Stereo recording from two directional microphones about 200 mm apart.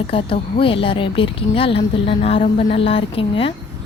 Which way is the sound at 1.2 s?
25° left (ahead or behind).